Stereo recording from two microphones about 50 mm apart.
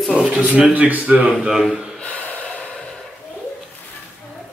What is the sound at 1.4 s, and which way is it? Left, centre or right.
Speech, centre.